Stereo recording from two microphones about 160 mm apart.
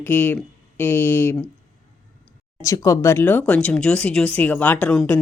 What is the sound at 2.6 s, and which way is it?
A woman's voice, 20° left (ahead or behind).